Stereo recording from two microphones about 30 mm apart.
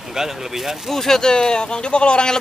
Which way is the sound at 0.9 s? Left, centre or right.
Centre.